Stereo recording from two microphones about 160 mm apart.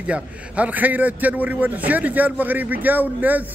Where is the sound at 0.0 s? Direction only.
10° right (ahead or behind).